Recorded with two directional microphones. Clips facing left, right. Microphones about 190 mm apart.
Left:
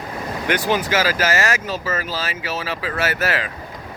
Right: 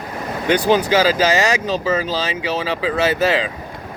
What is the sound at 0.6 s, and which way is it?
Speech, 15° right (ahead or behind).